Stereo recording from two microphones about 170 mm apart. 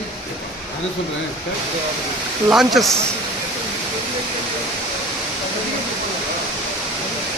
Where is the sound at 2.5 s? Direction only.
Centre (ahead or behind).